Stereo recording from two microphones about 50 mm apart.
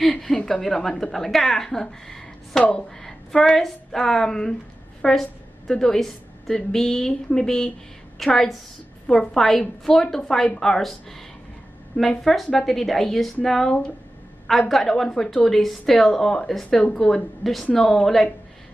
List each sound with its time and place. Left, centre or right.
0.1 s a woman's voice: centre
12.2 s a woman's voice: centre
17.4 s speech: centre